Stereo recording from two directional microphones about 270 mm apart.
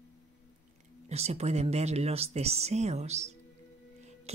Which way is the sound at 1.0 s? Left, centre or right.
Right.